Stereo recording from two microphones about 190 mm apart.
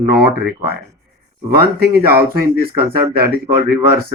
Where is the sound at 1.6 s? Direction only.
55° right (ahead or behind).